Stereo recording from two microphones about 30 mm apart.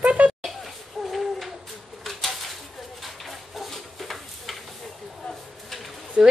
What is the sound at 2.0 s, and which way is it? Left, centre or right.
Pigeon, centre.